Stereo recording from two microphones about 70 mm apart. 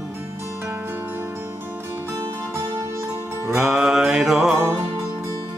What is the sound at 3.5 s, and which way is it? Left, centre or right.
Music, centre.